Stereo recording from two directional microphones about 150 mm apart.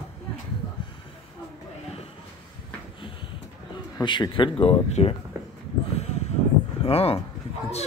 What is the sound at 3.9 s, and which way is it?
Speech, 30° left (ahead or behind).